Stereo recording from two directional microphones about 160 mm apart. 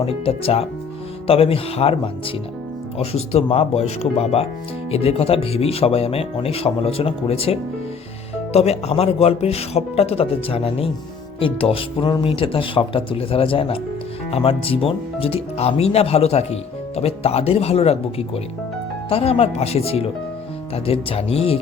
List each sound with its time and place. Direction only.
0.0 s speech: 35° left (ahead or behind)